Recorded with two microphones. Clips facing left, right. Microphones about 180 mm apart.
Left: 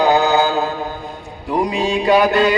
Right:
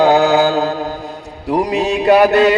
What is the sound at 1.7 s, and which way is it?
Music, 65° right (ahead or behind).